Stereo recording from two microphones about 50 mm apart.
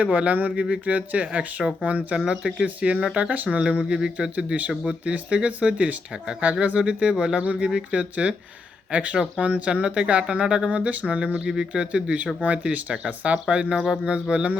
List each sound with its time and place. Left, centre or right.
0.0 s speech: right
2.1 s speech: centre
7.4 s speech: right